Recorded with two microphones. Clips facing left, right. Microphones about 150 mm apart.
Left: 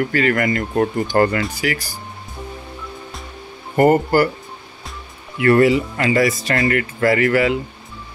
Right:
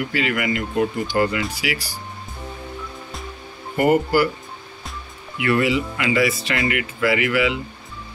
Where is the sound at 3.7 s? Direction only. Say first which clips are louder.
Left 3 dB; 45° left (ahead or behind).